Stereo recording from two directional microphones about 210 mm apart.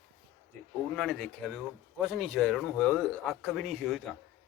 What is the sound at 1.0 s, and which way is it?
A man's voice, centre (ahead or behind).